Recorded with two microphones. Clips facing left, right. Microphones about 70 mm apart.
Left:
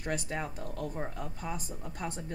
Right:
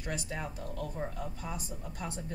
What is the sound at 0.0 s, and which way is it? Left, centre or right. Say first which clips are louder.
A woman's voice: left 3 dB; left.